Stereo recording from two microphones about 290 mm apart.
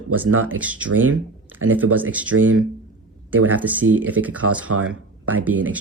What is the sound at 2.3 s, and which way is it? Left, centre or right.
Speech, right.